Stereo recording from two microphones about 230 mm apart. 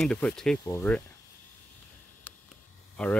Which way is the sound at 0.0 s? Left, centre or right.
Centre.